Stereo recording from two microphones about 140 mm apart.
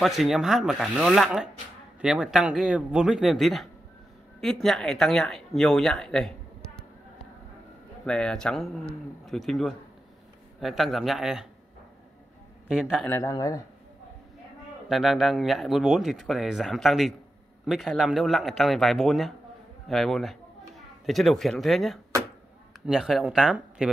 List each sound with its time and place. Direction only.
0.0 s speech: centre (ahead or behind)
8.0 s speech: 5° left (ahead or behind)
12.6 s a man's voice: 5° right (ahead or behind)
13.0 s speech: 20° left (ahead or behind)
14.9 s speech: centre (ahead or behind)